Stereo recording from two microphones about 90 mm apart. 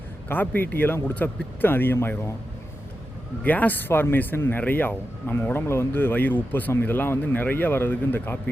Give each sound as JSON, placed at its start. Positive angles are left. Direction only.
{"t": 0.3, "sound": "speech", "side_deg": 20}
{"t": 3.4, "sound": "speech", "side_deg": 20}